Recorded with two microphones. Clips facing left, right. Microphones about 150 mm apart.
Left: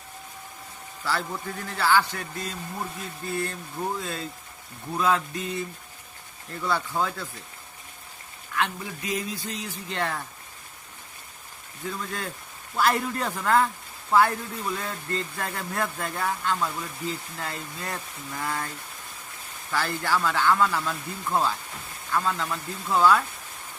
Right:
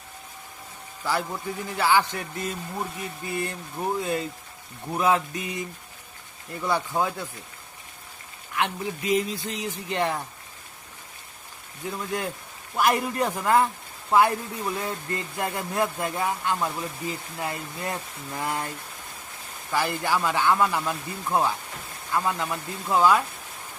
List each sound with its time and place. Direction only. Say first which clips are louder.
1.0 s speech: right 2 dB; 15° right (ahead or behind)
3.2 s speech: left 1 dB; 15° right (ahead or behind)
8.5 s speech: right 2 dB; 20° right (ahead or behind)
11.9 s speech: right 3 dB; 20° right (ahead or behind)
19.7 s speech: right 1 dB; 15° right (ahead or behind)